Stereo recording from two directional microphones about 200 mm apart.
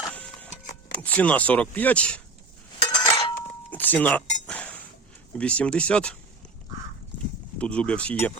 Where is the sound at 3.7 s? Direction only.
10° left (ahead or behind).